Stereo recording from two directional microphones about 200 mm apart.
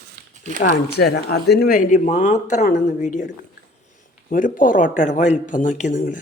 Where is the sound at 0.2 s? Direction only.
50° right (ahead or behind).